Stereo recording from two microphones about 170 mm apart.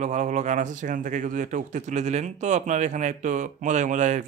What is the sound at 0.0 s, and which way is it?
A man's voice, 45° right (ahead or behind).